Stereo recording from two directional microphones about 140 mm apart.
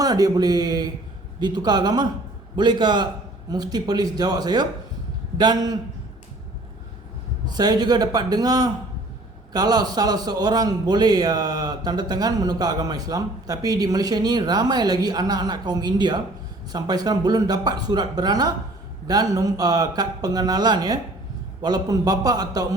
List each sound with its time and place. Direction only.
0.0 s a man's voice: 25° right (ahead or behind)
7.4 s a man's voice: 30° right (ahead or behind)